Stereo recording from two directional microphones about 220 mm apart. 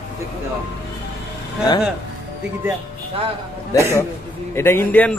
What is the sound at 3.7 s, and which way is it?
Speech, 10° right (ahead or behind).